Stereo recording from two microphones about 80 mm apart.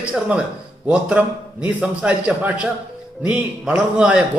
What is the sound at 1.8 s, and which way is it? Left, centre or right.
Music, centre.